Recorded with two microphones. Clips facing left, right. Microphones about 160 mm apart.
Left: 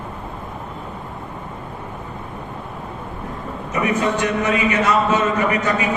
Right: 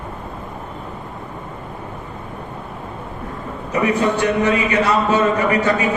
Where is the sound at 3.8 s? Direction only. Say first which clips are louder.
Right 2 dB; 30° right (ahead or behind).